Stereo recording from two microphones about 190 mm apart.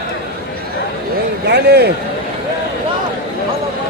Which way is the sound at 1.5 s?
60° right (ahead or behind).